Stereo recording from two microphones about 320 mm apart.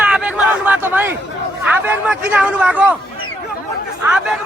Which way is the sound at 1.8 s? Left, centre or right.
Centre.